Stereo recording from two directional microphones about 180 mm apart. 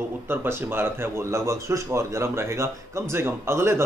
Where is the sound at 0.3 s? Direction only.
10° right (ahead or behind).